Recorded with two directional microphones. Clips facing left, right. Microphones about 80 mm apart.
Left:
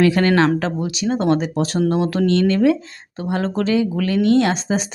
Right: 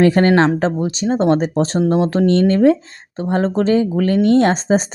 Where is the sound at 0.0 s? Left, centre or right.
Right.